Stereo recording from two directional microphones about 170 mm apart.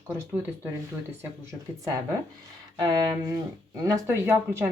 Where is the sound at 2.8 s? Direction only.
25° right (ahead or behind).